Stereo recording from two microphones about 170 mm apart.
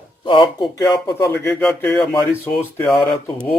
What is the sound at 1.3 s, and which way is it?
Speech, 10° left (ahead or behind).